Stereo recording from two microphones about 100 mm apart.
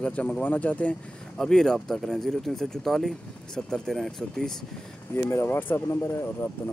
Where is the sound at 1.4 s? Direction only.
5° left (ahead or behind).